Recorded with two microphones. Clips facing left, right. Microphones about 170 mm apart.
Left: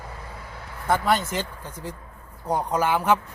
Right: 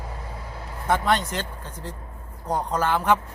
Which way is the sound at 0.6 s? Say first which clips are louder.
Right 2 dB; 25° right (ahead or behind).